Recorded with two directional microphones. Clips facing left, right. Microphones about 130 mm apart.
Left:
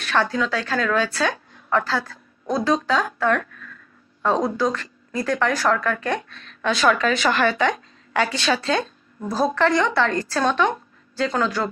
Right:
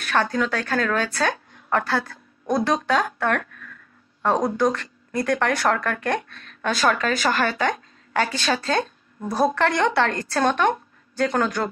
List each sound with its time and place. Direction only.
0.0 s speech: 45° right (ahead or behind)
9.6 s speech: 55° right (ahead or behind)